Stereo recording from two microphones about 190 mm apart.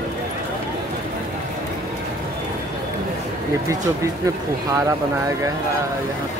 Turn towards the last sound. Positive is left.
turn(degrees=-20)  # may be behind; listen again after turning